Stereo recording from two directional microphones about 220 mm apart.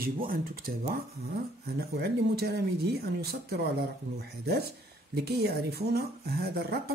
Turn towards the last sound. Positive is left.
turn(degrees=-45)  # may be behind; listen again after turning